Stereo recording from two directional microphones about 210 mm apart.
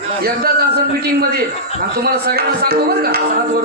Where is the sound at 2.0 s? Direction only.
50° right (ahead or behind).